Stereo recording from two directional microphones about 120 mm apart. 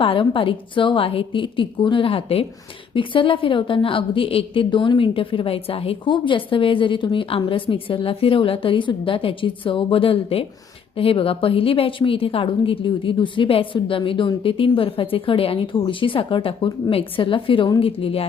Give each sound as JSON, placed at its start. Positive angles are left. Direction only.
{"t": 0.0, "sound": "a woman's voice", "side_deg": 45}